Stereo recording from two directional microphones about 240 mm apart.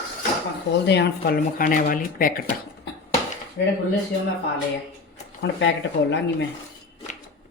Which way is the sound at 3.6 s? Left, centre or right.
Left.